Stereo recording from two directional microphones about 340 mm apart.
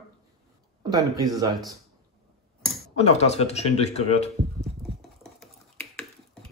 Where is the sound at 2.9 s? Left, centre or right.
Centre.